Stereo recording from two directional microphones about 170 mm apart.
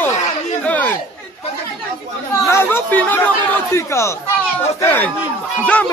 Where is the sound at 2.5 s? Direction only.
15° left (ahead or behind).